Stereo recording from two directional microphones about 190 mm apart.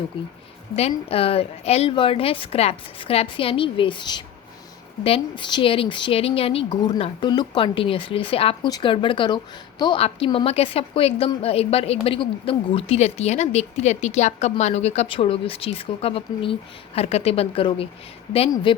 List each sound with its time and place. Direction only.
0.1 s a woman's voice: 25° left (ahead or behind)